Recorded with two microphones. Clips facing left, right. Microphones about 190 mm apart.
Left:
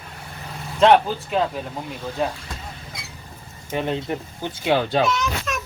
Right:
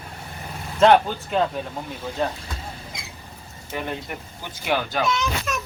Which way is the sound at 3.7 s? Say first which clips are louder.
Left 6 dB; 20° left (ahead or behind).